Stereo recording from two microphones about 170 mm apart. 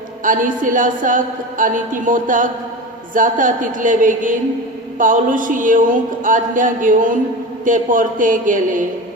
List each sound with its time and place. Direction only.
0.3 s speech: 50° right (ahead or behind)